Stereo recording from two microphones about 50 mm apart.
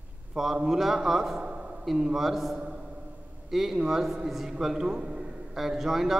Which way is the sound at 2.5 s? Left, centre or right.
Centre.